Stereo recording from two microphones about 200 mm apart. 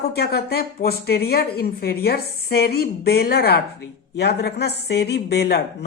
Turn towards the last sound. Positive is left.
turn(degrees=55)  # may be behind; listen again after turning